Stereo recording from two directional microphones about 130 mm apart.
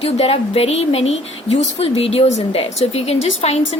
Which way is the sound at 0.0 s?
50° left (ahead or behind).